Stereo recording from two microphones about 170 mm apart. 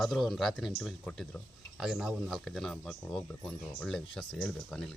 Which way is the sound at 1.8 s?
5° right (ahead or behind).